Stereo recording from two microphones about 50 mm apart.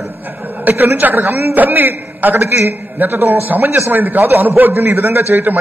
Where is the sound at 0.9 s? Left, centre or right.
Right.